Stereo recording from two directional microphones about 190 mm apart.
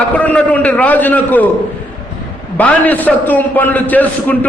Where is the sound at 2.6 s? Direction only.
10° left (ahead or behind).